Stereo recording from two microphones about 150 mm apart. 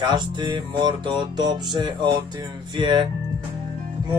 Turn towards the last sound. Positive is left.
turn(degrees=-30)  # may be behind; listen again after turning